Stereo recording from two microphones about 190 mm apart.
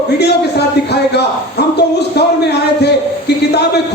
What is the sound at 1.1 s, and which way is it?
A man's voice, 60° left (ahead or behind).